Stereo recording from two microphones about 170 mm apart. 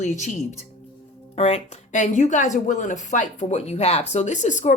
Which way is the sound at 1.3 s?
40° left (ahead or behind).